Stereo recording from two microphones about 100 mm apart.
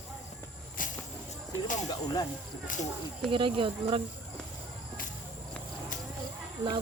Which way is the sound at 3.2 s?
60° right (ahead or behind).